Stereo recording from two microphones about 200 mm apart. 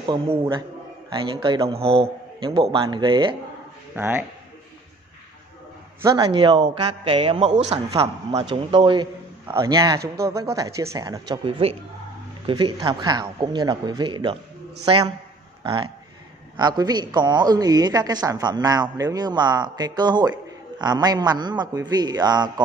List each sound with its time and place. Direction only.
0.4 s a woman's voice: 25° right (ahead or behind)
3.9 s speech: 10° right (ahead or behind)
6.0 s a woman's voice: 20° right (ahead or behind)